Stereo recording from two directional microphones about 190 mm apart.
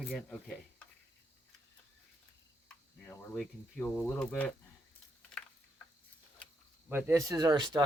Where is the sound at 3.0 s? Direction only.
5° left (ahead or behind).